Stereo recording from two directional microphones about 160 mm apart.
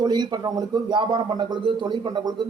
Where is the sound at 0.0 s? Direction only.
25° right (ahead or behind).